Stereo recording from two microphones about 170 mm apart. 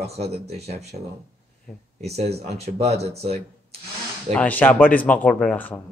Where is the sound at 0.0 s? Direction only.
40° right (ahead or behind).